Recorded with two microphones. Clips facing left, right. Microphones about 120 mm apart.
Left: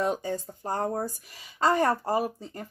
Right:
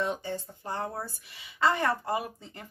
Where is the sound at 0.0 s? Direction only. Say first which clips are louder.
Left 4 dB; 45° left (ahead or behind).